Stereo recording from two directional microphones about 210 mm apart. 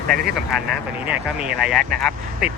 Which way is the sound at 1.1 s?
5° right (ahead or behind).